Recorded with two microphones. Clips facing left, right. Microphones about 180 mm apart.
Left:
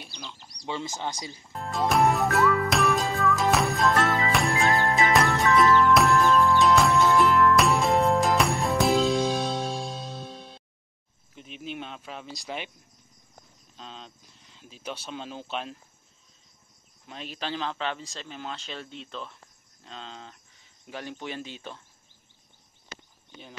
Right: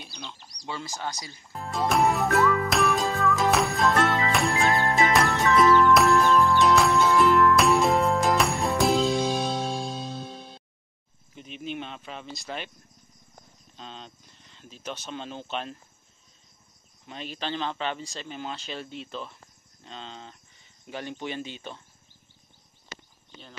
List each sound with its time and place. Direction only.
0.7 s speech: 20° left (ahead or behind)
1.5 s music: centre (ahead or behind)
11.3 s cricket: centre (ahead or behind)
13.7 s speech: centre (ahead or behind)
17.0 s a man's voice: centre (ahead or behind)